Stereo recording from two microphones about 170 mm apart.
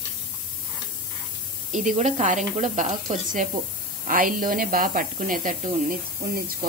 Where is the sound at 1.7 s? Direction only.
50° right (ahead or behind).